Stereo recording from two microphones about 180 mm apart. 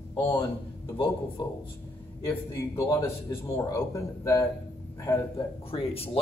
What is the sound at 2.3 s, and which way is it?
A man's voice, 15° left (ahead or behind).